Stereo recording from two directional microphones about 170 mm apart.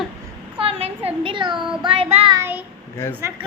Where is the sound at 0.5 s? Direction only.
35° right (ahead or behind).